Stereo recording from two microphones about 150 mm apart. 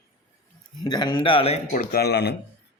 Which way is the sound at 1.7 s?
85° left.